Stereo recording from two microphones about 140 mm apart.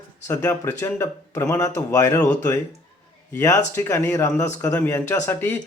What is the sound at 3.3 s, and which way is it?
Speech, 20° left (ahead or behind).